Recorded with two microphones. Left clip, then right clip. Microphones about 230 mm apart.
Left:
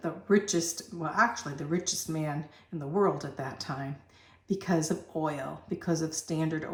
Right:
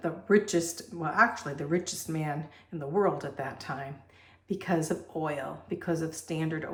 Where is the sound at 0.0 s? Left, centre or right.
Centre.